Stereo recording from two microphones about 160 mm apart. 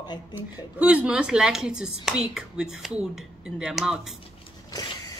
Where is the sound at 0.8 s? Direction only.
10° right (ahead or behind).